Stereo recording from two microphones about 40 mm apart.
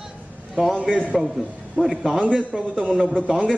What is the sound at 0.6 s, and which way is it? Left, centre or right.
Speech, centre.